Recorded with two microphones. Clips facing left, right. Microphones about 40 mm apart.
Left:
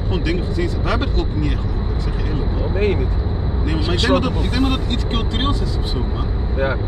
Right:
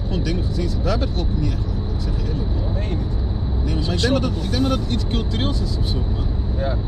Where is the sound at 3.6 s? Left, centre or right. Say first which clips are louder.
Left 3 dB; left.